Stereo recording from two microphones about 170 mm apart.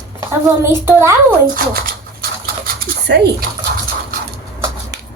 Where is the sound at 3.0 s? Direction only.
75° right (ahead or behind).